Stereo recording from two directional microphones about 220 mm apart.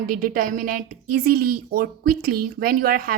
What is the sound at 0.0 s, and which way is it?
A woman's voice, 40° right (ahead or behind).